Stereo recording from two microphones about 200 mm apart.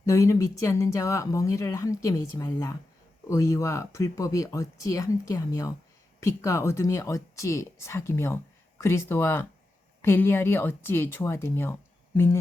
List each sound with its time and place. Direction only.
0.0 s speech: 15° left (ahead or behind)